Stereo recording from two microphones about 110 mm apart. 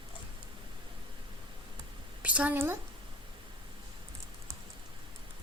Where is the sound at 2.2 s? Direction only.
10° right (ahead or behind).